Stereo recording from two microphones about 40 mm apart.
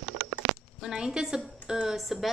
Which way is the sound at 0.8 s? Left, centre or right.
Centre.